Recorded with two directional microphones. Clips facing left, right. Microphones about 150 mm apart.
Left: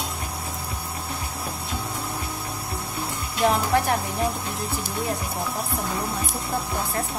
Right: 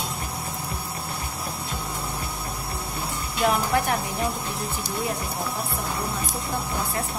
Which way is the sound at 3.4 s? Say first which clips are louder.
Left 2 dB; 30° left (ahead or behind).